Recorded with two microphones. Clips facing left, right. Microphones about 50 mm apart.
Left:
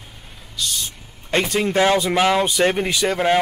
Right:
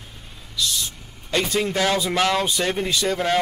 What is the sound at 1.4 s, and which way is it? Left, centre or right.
Speech, centre.